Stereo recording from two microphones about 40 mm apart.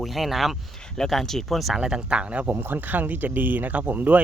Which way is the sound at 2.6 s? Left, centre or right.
Right.